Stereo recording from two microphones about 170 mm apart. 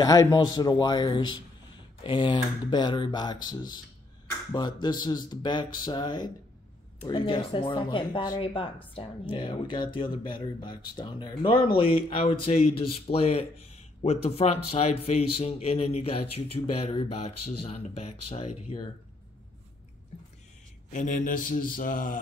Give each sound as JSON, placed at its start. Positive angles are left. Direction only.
{"t": 0.0, "sound": "speech", "side_deg": 20}
{"t": 12.9, "sound": "speech", "side_deg": 35}
{"t": 20.9, "sound": "speech", "side_deg": 50}